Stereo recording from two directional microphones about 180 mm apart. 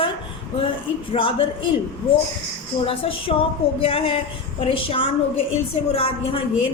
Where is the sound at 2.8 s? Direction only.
30° left (ahead or behind).